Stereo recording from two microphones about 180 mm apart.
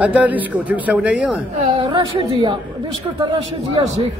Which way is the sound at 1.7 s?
30° right (ahead or behind).